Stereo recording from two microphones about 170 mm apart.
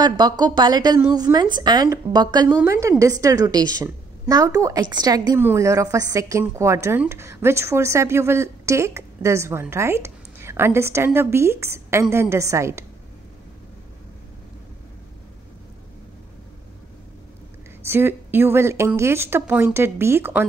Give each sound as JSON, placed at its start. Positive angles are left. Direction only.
{"t": 0.0, "sound": "a woman's voice", "side_deg": -25}
{"t": 17.8, "sound": "speech", "side_deg": -15}